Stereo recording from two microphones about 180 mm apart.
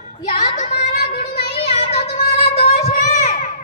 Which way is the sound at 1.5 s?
35° left (ahead or behind).